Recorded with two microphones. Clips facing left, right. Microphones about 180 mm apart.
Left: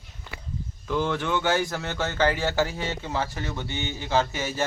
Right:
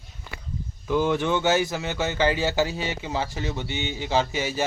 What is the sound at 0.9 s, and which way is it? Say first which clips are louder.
Speech: right 3 dB; 15° right (ahead or behind).